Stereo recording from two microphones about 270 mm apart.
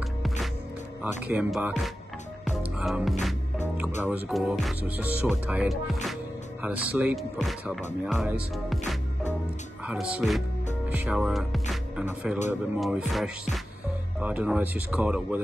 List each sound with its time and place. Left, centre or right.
1.2 s speech: centre
11.7 s music: centre
12.4 s speech: centre